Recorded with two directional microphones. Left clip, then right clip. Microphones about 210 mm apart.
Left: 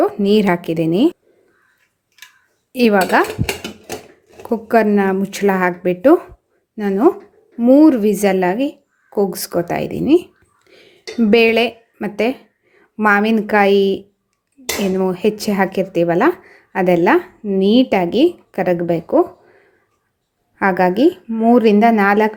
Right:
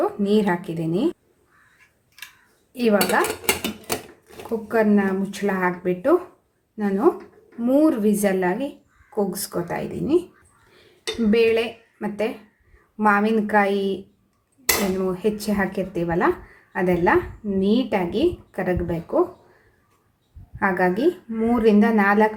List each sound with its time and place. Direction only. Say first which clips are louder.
0.0 s speech: left 6 dB; 35° left (ahead or behind)
2.7 s speech: left 6 dB; 45° left (ahead or behind)
4.7 s speech: left 6 dB; 45° left (ahead or behind)
11.3 s speech: left 6 dB; 40° left (ahead or behind)
20.6 s speech: left 7 dB; 40° left (ahead or behind)